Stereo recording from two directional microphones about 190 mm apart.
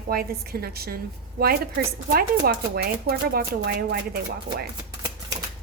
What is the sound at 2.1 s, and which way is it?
Speech, 55° right (ahead or behind).